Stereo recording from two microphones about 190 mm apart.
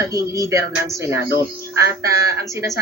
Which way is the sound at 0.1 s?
15° right (ahead or behind).